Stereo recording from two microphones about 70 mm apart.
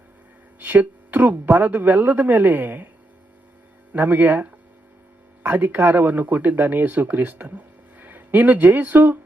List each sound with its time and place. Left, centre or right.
0.6 s speech: right
3.9 s speech: right